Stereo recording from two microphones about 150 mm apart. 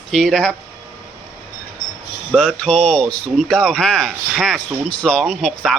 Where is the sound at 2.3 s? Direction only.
5° left (ahead or behind).